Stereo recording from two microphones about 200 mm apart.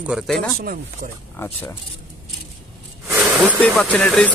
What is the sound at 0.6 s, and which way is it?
Speech, 50° right (ahead or behind).